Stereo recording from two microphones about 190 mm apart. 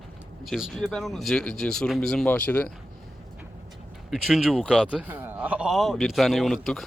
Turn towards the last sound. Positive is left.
turn(degrees=0)  # may be behind; listen again after turning